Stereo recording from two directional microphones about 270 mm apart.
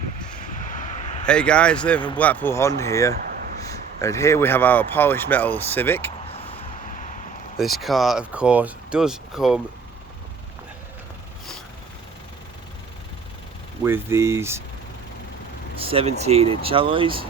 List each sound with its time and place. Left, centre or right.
0.6 s vehicle: left
1.3 s speech: centre
3.2 s a sound: right
3.7 s speech: centre
6.3 s a sound: left
7.8 s speech: centre
13.8 s speech: centre
15.9 s speech: right